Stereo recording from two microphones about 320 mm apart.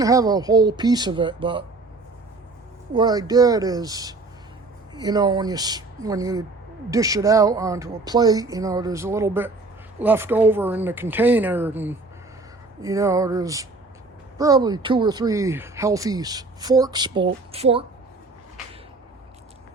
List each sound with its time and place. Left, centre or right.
0.0 s speech: centre
2.9 s speech: centre